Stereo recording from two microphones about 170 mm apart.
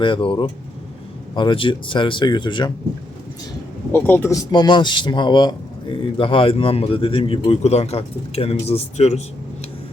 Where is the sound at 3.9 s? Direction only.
10° left (ahead or behind).